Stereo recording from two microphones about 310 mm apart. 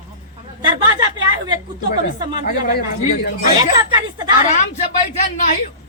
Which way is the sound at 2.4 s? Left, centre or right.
Left.